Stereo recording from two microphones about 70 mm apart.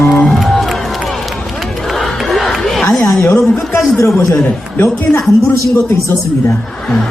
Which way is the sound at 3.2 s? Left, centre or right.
Left.